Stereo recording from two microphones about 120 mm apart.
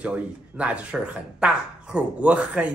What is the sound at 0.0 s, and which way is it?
Speech, 10° right (ahead or behind).